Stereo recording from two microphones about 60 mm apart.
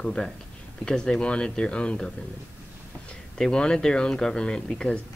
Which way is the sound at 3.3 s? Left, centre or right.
Centre.